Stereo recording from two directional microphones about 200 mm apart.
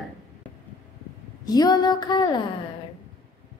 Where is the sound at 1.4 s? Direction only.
20° left (ahead or behind).